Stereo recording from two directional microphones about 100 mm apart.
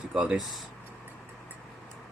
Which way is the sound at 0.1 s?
10° right (ahead or behind).